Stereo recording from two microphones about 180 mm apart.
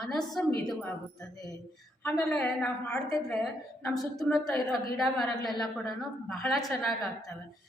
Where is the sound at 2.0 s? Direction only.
5° left (ahead or behind).